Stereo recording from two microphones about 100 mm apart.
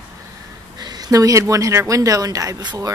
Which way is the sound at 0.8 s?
40° right (ahead or behind).